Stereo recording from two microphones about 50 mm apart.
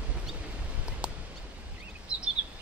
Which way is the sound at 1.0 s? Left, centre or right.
Right.